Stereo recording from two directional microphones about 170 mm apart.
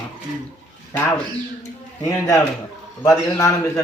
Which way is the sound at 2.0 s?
20° left (ahead or behind).